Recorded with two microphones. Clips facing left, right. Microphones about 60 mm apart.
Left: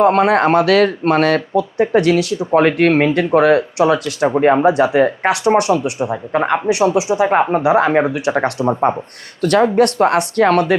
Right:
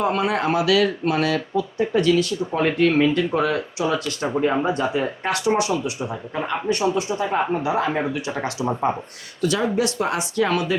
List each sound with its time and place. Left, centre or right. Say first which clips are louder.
0.0 s speech: left 9 dB; left